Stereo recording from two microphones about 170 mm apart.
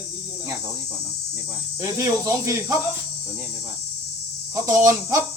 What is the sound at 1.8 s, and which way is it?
Speech, 15° right (ahead or behind).